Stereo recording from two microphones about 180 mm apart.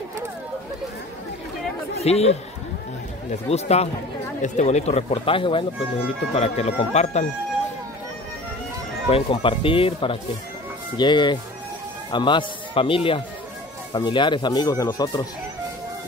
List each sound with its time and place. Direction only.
2.0 s speech: 35° left (ahead or behind)
9.1 s speech: 30° left (ahead or behind)